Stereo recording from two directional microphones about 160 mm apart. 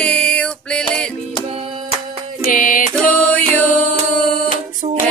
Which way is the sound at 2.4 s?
60° left (ahead or behind).